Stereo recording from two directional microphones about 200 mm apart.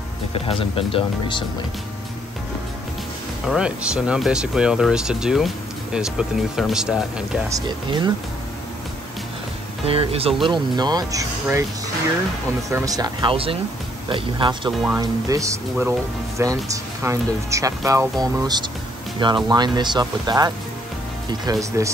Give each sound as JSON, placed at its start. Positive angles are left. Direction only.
{"t": 0.3, "sound": "speech", "side_deg": 30}
{"t": 3.4, "sound": "speech", "side_deg": -5}
{"t": 7.4, "sound": "speech", "side_deg": -20}
{"t": 9.8, "sound": "speech", "side_deg": -30}
{"t": 12.6, "sound": "speech", "side_deg": -15}